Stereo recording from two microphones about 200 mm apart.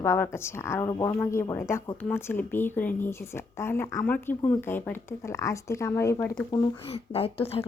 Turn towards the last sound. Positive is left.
turn(degrees=30)  # may be behind; listen again after turning